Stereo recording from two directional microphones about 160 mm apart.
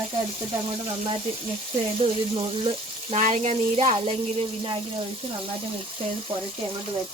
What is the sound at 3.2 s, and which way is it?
Speech, 50° right (ahead or behind).